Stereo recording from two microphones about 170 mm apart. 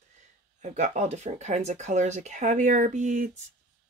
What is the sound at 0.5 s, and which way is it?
Speech, 45° right (ahead or behind).